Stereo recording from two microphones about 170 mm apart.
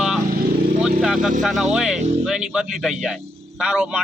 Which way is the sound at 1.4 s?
Centre (ahead or behind).